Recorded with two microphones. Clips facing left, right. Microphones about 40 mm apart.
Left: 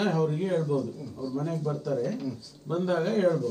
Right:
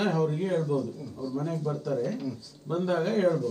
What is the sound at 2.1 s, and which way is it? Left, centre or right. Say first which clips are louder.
Speech: even; centre.